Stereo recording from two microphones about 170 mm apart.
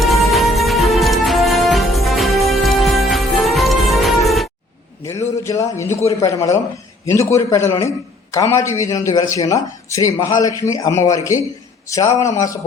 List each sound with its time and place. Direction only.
0.0 s music: centre (ahead or behind)
5.4 s a man's voice: 20° left (ahead or behind)